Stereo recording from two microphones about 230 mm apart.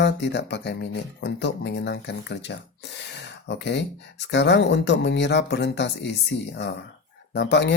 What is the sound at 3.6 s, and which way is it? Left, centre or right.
Speech, left.